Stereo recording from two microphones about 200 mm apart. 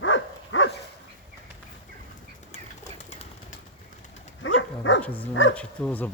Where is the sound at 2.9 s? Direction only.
35° left (ahead or behind).